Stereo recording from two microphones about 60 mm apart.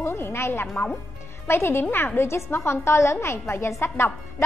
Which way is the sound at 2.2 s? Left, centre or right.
Left.